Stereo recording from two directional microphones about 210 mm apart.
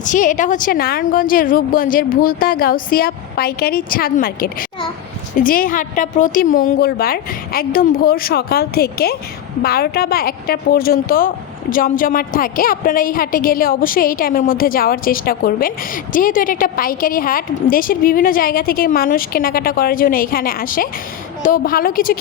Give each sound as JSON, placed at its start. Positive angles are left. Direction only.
{"t": 0.0, "sound": "a woman's voice", "side_deg": 40}